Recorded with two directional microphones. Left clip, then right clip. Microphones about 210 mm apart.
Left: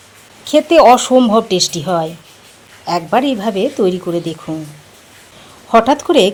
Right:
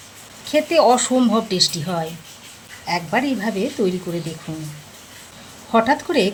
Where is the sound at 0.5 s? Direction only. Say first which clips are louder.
Left 7 dB; 25° left (ahead or behind).